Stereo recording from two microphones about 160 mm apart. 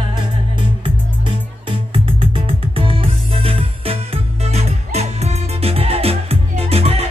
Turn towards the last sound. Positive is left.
turn(degrees=-40)  # may be behind; listen again after turning